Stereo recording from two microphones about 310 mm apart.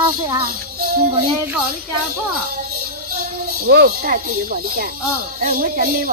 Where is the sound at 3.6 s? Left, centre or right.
Right.